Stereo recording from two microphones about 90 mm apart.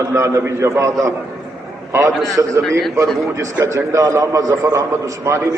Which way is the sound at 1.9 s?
35° right (ahead or behind).